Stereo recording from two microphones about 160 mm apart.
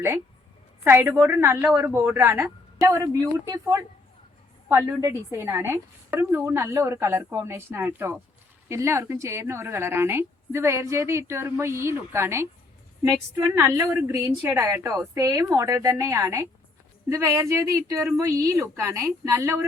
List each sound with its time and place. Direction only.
0.9 s a woman's voice: 15° right (ahead or behind)
13.6 s a woman's voice: 15° right (ahead or behind)